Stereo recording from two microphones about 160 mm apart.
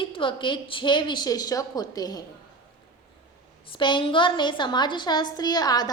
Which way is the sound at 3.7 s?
30° left (ahead or behind).